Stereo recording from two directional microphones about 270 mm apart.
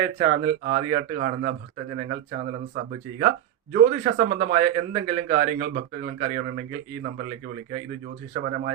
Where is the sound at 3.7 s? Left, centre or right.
Right.